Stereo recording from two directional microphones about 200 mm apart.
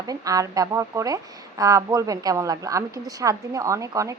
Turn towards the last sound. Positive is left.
turn(degrees=-15)  # may be behind; listen again after turning